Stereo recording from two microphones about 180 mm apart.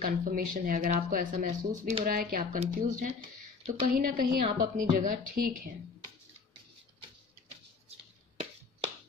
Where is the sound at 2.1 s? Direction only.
50° right (ahead or behind).